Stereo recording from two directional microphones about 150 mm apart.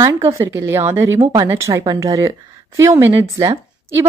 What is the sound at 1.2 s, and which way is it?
Speech, 30° right (ahead or behind).